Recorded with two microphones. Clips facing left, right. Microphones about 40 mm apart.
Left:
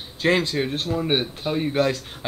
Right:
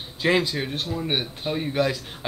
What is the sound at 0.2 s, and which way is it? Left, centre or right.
Speech, centre.